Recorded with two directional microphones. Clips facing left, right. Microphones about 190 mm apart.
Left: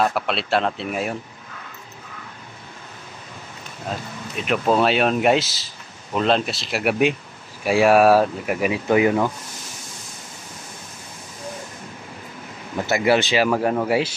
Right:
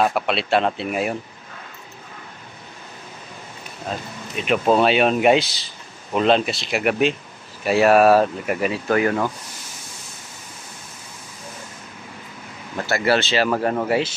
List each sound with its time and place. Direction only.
0.0 s speech: centre (ahead or behind)
4.5 s speech: centre (ahead or behind)
12.7 s speech: 15° left (ahead or behind)
13.5 s speech: 5° left (ahead or behind)